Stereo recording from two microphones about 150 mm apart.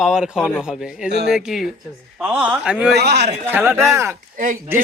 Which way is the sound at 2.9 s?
90° right.